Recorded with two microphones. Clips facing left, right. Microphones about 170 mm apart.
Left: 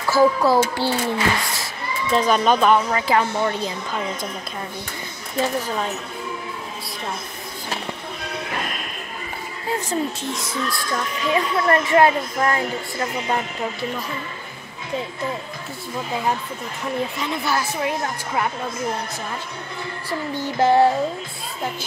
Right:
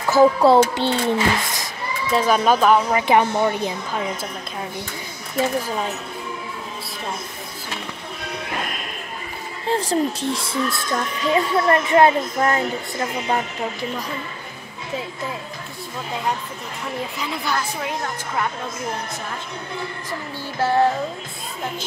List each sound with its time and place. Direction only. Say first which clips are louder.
0.1 s a child's voice: right 3 dB; 25° right (ahead or behind)
2.1 s speech: even; 5° right (ahead or behind)
3.0 s a child's voice: right 3 dB; 20° right (ahead or behind)
9.7 s a child's voice: right 3 dB; 30° right (ahead or behind)
17.2 s speech: left 2 dB; centre (ahead or behind)
20.3 s music: left 4 dB; 20° left (ahead or behind)